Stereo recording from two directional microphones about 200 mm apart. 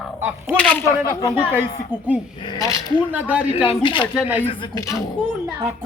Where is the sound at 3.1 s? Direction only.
5° right (ahead or behind).